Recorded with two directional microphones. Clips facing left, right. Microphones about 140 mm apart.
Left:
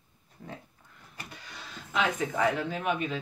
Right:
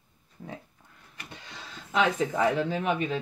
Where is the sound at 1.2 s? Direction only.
25° right (ahead or behind).